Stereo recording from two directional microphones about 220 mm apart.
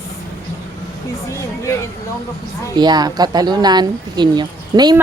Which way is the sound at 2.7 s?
20° right (ahead or behind).